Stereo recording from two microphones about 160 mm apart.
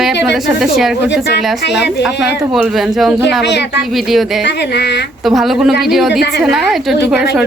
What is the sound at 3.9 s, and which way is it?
Speech, centre (ahead or behind).